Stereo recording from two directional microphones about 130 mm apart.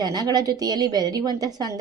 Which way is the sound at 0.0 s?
30° right (ahead or behind).